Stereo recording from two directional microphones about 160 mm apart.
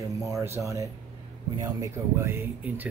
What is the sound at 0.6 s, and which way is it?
Speech, 20° right (ahead or behind).